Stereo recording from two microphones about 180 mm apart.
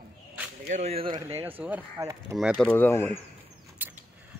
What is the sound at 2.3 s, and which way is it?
Speech, centre (ahead or behind).